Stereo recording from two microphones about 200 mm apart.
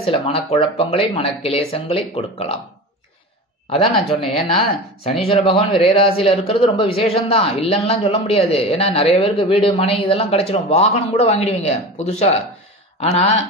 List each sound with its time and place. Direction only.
0.0 s a man's voice: 30° left (ahead or behind)
3.7 s a man's voice: 30° left (ahead or behind)